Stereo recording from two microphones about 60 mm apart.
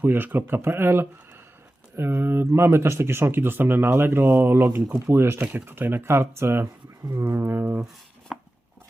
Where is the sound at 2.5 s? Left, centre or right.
Right.